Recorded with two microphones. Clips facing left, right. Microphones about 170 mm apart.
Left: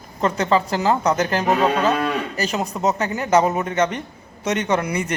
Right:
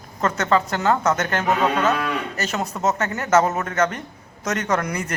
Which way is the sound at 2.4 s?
15° left (ahead or behind).